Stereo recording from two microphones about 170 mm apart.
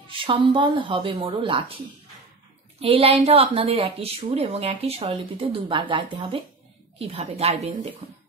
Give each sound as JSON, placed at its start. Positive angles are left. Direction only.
{"t": 0.1, "sound": "speech", "side_deg": -30}
{"t": 2.8, "sound": "a woman's voice", "side_deg": -35}